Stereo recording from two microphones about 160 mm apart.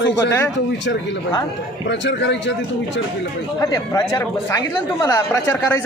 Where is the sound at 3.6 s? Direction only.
25° left (ahead or behind).